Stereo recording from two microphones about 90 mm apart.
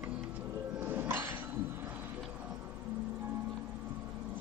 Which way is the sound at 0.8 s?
25° right (ahead or behind).